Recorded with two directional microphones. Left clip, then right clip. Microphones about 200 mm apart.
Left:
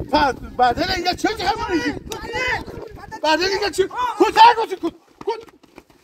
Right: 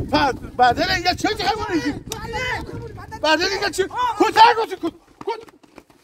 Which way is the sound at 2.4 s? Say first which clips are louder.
Left 3 dB; 40° left (ahead or behind).